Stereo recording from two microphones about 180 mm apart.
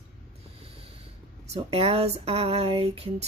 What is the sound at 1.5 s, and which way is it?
A woman's voice, 35° right (ahead or behind).